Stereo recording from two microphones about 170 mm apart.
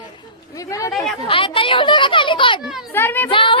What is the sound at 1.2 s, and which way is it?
A child's voice, 30° left (ahead or behind).